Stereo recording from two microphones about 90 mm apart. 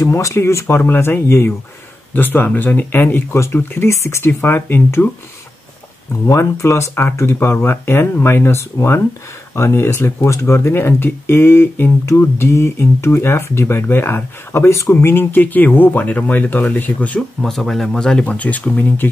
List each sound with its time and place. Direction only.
0.0 s speech: 35° left (ahead or behind)
6.2 s speech: 30° left (ahead or behind)
17.4 s speech: 5° left (ahead or behind)